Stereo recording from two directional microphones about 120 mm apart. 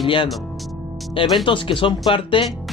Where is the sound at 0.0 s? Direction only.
45° left (ahead or behind).